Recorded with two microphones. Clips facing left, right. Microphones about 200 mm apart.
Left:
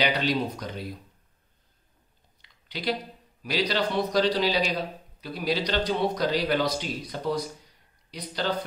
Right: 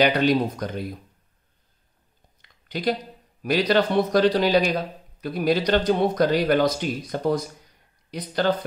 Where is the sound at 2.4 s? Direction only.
50° right (ahead or behind).